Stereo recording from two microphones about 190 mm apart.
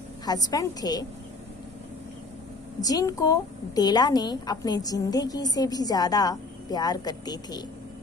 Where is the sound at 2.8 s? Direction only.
20° left (ahead or behind).